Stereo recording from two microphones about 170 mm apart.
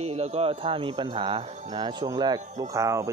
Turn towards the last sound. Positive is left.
turn(degrees=-20)  # may be behind; listen again after turning